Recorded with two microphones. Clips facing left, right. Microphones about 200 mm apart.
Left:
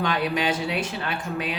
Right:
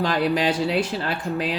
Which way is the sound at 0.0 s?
35° right (ahead or behind).